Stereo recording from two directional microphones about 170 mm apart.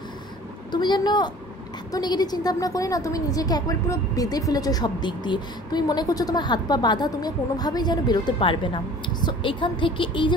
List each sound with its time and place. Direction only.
0.7 s a woman's voice: 25° left (ahead or behind)